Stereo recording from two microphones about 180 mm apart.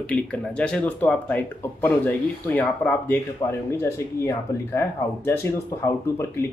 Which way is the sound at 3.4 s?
20° left (ahead or behind).